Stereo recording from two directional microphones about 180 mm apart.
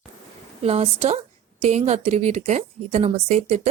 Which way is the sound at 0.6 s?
35° right (ahead or behind).